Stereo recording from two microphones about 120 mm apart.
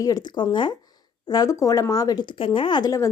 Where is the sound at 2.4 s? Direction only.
45° left (ahead or behind).